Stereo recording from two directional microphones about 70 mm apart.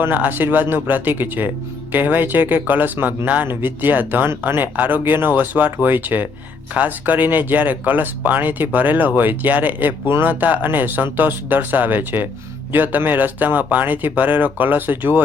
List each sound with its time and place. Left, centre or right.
0.0 s speech: right